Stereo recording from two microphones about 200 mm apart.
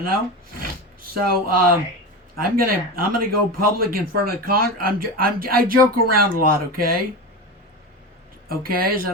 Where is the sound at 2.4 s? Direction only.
50° right (ahead or behind).